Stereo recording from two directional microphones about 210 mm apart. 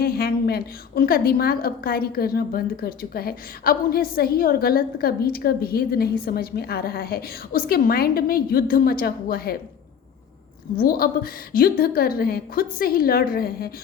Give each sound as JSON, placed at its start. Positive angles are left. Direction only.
{"t": 0.0, "sound": "a woman's voice", "side_deg": 45}
{"t": 10.8, "sound": "a woman's voice", "side_deg": 45}